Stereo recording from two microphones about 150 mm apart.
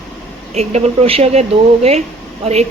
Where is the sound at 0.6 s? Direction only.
45° right (ahead or behind).